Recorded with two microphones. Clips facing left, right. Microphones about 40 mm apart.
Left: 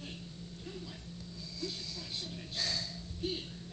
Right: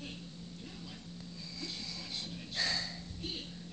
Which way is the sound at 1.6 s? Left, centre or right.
Right.